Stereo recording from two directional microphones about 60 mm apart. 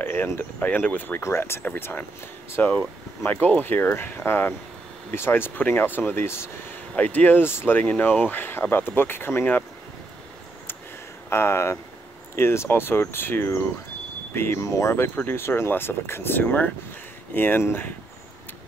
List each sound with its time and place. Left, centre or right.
0.0 s speech: left
1.2 s speech: left
1.8 s speech: left
7.0 s speech: left
11.2 s speech: left
15.1 s speech: left